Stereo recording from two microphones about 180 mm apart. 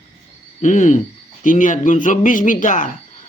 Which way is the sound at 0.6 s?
40° left (ahead or behind).